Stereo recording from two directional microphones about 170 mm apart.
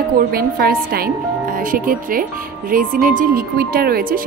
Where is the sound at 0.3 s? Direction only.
60° right (ahead or behind).